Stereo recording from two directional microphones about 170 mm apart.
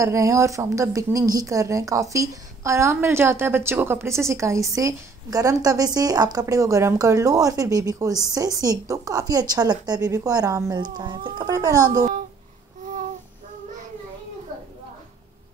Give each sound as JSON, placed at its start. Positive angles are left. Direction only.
{"t": 0.0, "sound": "speech", "side_deg": -20}